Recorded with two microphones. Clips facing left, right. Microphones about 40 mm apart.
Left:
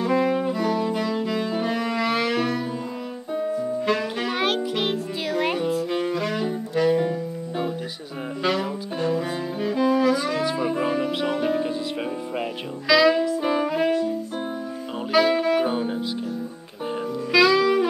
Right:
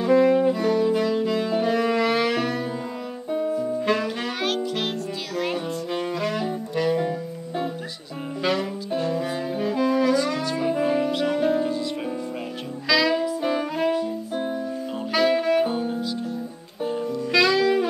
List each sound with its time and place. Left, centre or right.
0.0 s music: centre
4.4 s music: centre
8.4 s saxophone: centre
11.1 s music: centre
12.8 s music: centre
13.4 s saxophone: centre
15.1 s saxophone: centre
15.7 s music: left
17.3 s saxophone: centre